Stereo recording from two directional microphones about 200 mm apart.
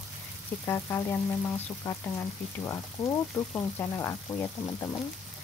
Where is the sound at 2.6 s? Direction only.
15° left (ahead or behind).